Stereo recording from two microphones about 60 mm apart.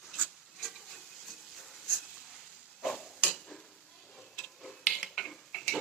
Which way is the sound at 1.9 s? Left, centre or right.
Centre.